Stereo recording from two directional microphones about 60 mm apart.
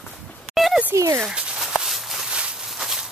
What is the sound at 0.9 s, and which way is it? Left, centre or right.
Speech, right.